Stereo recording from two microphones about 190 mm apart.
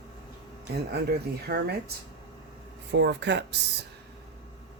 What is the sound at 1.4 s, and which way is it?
Speech, 55° right (ahead or behind).